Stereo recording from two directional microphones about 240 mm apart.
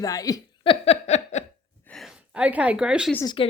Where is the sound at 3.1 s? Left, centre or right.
Centre.